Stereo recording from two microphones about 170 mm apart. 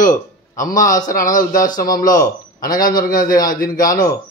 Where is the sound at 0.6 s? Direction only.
50° left (ahead or behind).